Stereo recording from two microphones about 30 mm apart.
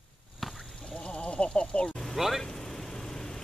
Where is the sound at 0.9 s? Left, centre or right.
Left.